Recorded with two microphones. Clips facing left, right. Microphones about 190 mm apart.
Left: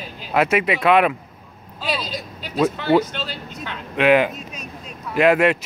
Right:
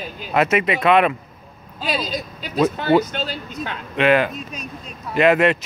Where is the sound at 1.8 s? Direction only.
45° right (ahead or behind).